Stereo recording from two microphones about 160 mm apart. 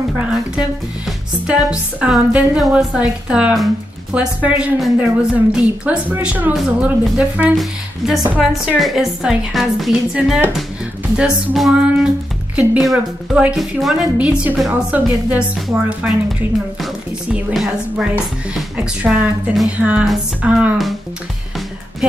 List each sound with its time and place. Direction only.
0.3 s a woman's voice: 5° right (ahead or behind)